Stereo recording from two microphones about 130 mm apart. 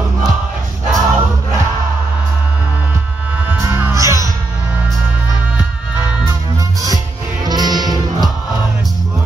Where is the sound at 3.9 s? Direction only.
25° right (ahead or behind).